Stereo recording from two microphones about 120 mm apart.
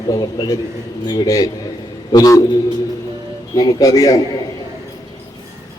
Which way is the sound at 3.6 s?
30° left (ahead or behind).